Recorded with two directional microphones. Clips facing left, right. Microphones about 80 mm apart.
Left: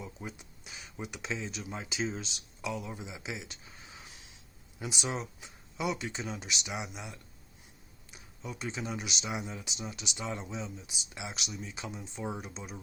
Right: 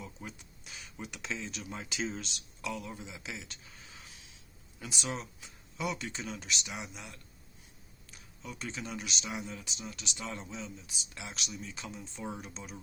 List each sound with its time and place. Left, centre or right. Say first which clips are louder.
0.0 s a sound: left 3 dB; centre
1.0 s speech: left 2 dB; centre
8.4 s speech: left 3 dB; centre
9.4 s speech: left 2 dB; centre